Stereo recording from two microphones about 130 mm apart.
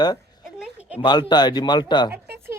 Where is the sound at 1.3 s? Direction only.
35° left (ahead or behind).